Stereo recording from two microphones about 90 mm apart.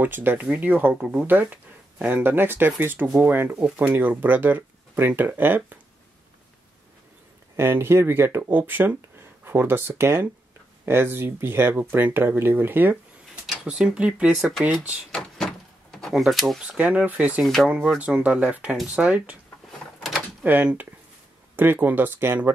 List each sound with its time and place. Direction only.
0.0 s speech: 20° right (ahead or behind)
7.5 s speech: 25° right (ahead or behind)
14.3 s speech: centre (ahead or behind)
14.7 s speech: 15° right (ahead or behind)
15.0 s door: 5° left (ahead or behind)
16.6 s speech: 15° right (ahead or behind)
17.4 s speech: centre (ahead or behind)
17.6 s speech: 10° right (ahead or behind)
20.4 s speech: 20° right (ahead or behind)